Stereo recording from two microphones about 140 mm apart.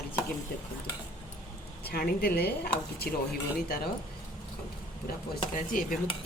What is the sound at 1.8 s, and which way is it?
Speech, 90° left.